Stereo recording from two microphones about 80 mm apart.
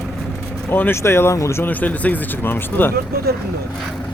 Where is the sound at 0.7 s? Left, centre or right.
Left.